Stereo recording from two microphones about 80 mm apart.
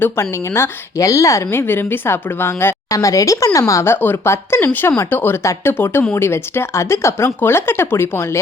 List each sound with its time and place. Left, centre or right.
0.0 s a woman's voice: left
3.0 s speech: left
3.9 s a woman's voice: left